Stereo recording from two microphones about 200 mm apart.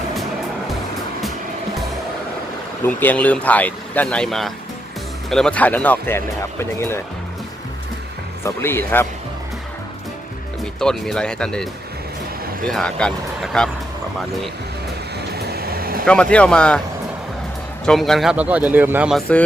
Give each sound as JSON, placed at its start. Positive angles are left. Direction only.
{"t": 2.8, "sound": "speech", "side_deg": 10}
{"t": 8.4, "sound": "speech", "side_deg": 10}
{"t": 10.8, "sound": "speech", "side_deg": 0}
{"t": 15.4, "sound": "vehicle", "side_deg": -50}
{"t": 16.0, "sound": "speech", "side_deg": 5}
{"t": 17.8, "sound": "speech", "side_deg": 0}